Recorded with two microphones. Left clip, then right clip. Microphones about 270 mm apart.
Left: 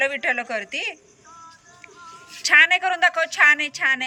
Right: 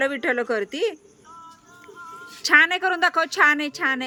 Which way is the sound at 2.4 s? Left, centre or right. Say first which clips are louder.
Left 2 dB; centre.